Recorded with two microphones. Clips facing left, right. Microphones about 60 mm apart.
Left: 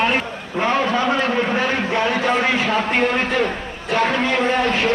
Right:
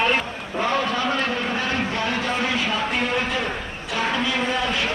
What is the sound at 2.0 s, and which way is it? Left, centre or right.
A man's voice, left.